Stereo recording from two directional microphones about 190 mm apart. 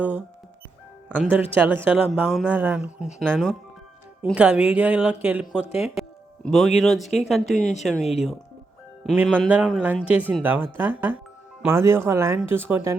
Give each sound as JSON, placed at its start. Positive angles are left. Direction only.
{"t": 1.1, "sound": "speech", "side_deg": -10}
{"t": 8.0, "sound": "speech", "side_deg": 35}
{"t": 9.0, "sound": "speech", "side_deg": -10}